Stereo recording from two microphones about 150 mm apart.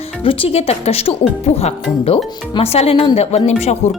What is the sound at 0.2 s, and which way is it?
Speech, 35° left (ahead or behind).